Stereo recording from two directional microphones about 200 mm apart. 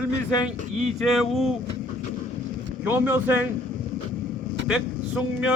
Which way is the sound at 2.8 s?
10° right (ahead or behind).